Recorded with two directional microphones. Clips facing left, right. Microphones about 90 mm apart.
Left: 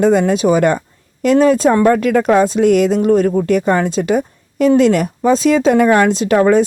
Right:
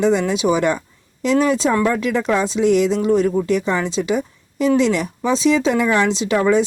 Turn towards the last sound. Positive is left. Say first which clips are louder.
# left 5 dB
turn(degrees=50)  # may be behind; listen again after turning